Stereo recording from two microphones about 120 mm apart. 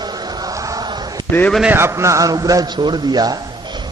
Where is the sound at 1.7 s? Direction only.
20° right (ahead or behind).